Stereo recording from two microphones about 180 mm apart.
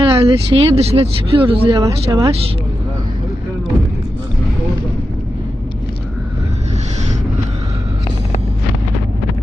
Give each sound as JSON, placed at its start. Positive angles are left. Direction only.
{"t": 0.0, "sound": "speech", "side_deg": -25}
{"t": 1.8, "sound": "speech", "side_deg": -20}